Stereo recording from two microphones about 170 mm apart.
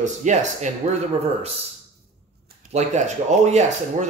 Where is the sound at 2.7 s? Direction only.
40° right (ahead or behind).